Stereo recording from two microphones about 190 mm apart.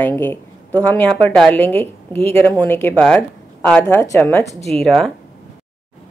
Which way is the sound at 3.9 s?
15° left (ahead or behind).